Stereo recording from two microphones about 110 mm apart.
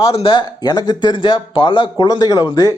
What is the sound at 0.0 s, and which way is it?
Speech, 60° left (ahead or behind).